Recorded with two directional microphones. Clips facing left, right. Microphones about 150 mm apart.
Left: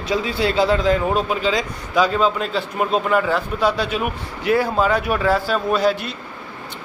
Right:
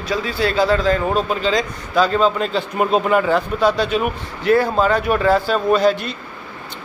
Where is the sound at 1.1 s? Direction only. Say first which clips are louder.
Right 1 dB; 5° left (ahead or behind).